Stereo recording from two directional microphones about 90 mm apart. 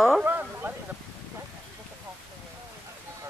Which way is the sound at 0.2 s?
25° right (ahead or behind).